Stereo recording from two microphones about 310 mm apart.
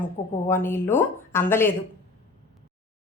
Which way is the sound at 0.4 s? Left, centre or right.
Centre.